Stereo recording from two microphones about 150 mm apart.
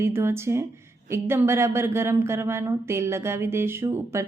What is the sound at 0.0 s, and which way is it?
A woman's voice, 15° right (ahead or behind).